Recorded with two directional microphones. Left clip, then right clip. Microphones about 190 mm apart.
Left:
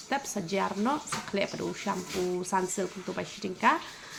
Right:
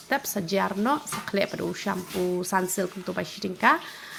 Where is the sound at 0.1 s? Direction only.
30° right (ahead or behind).